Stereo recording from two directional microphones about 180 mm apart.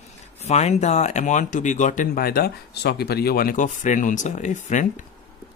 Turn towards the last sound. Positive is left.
turn(degrees=45)  # may be behind; listen again after turning